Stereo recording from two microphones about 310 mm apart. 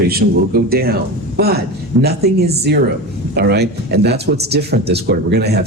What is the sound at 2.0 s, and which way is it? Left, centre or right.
Speech, right.